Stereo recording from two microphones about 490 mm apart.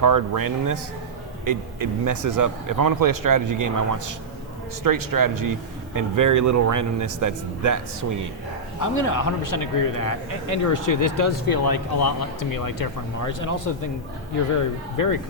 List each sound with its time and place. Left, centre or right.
0.0 s speech: right
8.8 s speech: left
14.9 s speech: left